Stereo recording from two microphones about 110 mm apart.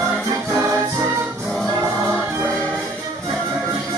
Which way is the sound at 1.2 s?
15° right (ahead or behind).